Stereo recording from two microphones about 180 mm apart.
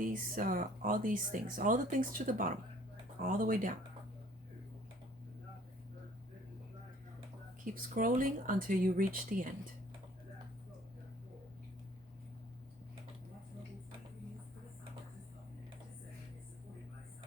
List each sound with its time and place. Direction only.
0.0 s speech: 50° right (ahead or behind)
7.6 s speech: 50° right (ahead or behind)